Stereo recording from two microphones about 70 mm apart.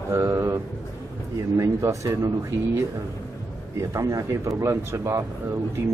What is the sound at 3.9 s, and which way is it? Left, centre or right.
Speech, right.